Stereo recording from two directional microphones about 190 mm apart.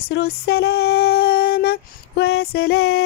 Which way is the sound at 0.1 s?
60° left (ahead or behind).